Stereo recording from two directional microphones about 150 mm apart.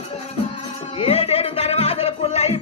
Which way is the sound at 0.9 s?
45° left (ahead or behind).